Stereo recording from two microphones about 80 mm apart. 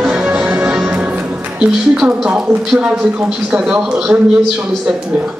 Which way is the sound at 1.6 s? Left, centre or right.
Centre.